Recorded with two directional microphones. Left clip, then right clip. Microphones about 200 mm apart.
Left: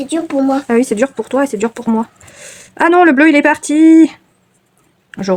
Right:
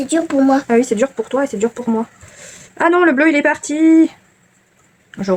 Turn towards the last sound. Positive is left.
turn(degrees=45)  # may be behind; listen again after turning